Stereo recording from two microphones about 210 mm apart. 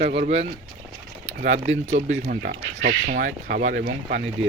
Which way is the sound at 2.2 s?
45° right (ahead or behind).